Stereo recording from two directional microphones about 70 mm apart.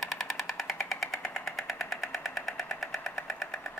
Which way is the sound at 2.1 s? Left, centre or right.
Centre.